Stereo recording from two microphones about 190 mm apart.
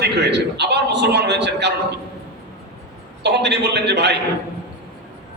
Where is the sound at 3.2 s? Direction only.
60° right (ahead or behind).